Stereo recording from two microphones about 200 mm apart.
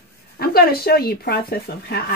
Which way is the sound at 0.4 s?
50° left (ahead or behind).